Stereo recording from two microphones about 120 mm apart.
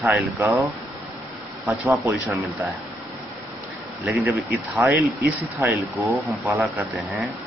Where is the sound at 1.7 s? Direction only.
20° right (ahead or behind).